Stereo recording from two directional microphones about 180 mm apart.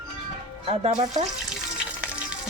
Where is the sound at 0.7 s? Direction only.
35° right (ahead or behind).